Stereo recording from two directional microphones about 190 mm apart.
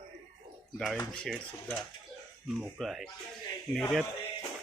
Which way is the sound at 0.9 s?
5° left (ahead or behind).